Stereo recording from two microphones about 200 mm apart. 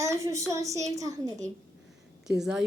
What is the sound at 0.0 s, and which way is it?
A child's voice, 15° right (ahead or behind).